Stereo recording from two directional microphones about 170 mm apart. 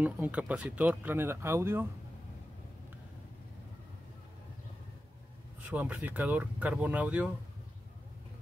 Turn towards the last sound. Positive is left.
turn(degrees=-10)  # may be behind; listen again after turning